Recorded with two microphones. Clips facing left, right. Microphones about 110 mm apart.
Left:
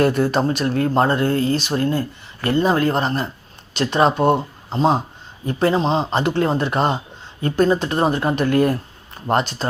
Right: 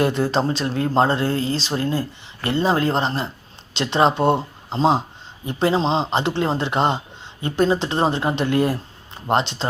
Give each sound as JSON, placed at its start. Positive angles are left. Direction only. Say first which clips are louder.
{"t": 0.0, "sound": "speech", "louder": "left 2 dB", "side_deg": -25}